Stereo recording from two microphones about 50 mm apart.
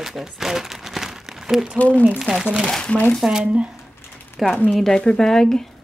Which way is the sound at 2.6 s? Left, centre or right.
Centre.